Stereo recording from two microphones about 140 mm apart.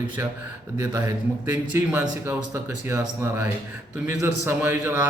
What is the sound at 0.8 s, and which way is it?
A man's voice, 25° right (ahead or behind).